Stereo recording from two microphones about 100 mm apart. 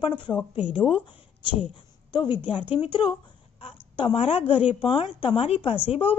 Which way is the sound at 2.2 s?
20° right (ahead or behind).